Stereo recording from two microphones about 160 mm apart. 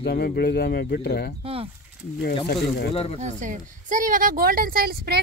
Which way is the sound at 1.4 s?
35° right (ahead or behind).